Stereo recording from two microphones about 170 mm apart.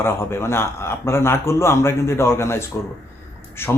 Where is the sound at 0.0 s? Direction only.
15° left (ahead or behind).